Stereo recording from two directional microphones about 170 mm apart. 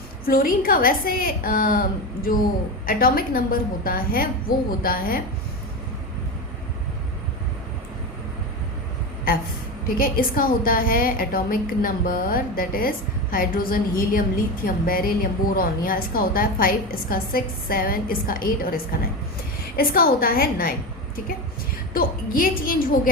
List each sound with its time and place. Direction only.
0.3 s a woman's voice: 55° left (ahead or behind)
2.8 s a woman's voice: 60° left (ahead or behind)
10.0 s a woman's voice: 55° left (ahead or behind)
21.9 s a woman's voice: 60° left (ahead or behind)